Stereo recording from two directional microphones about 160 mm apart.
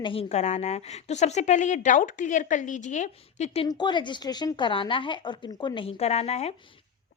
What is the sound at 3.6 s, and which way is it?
Speech, 25° left (ahead or behind).